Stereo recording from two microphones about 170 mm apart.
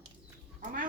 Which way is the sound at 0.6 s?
50° right (ahead or behind).